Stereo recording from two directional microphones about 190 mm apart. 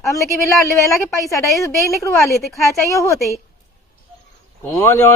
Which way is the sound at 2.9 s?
15° left (ahead or behind).